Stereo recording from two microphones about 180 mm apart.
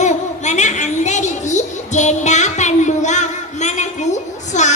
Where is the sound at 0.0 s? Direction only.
40° left (ahead or behind).